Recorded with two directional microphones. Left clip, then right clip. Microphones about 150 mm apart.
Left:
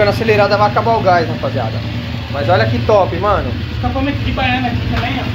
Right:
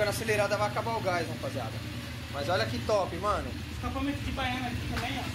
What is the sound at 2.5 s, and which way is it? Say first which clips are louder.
Speech: left 16 dB; centre (ahead or behind).